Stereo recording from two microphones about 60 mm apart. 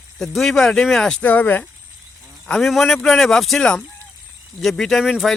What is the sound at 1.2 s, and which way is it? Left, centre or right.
Speech, left.